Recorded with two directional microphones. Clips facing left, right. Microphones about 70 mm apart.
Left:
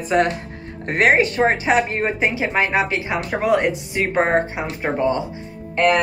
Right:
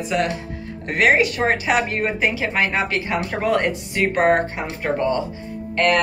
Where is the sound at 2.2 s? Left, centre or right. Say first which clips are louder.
Left 1 dB; left; by 3.7 s centre.